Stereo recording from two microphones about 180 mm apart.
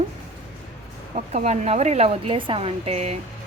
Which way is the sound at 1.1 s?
40° right (ahead or behind).